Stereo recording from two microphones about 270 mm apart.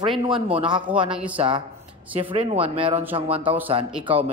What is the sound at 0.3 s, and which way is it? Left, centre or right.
Speech, centre.